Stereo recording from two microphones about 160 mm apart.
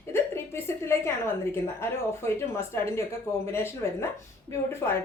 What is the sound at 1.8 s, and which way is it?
A woman's voice, 15° left (ahead or behind).